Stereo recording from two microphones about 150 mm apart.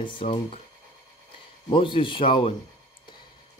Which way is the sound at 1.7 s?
35° left (ahead or behind).